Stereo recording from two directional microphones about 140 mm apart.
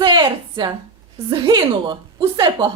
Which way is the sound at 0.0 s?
35° right (ahead or behind).